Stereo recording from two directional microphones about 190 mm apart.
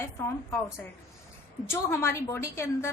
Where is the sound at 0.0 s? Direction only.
15° left (ahead or behind).